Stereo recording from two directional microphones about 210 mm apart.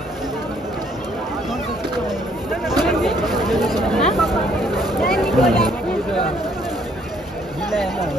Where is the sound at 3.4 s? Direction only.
Centre (ahead or behind).